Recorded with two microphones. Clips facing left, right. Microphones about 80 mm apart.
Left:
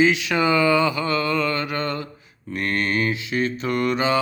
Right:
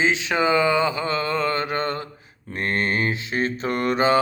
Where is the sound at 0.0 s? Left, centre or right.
Right.